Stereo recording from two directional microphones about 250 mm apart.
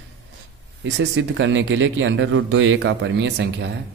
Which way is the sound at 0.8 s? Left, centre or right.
Right.